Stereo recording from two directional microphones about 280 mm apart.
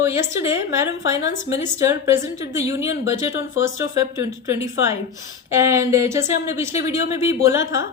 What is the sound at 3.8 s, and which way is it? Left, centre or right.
A woman's voice, centre.